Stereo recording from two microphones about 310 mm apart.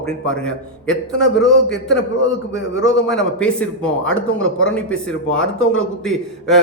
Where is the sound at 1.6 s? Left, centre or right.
Left.